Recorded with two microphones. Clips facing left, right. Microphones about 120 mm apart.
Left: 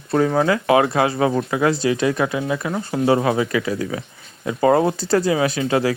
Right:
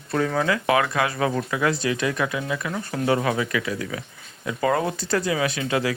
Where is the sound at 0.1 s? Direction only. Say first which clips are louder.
Left 5 dB; 30° left (ahead or behind).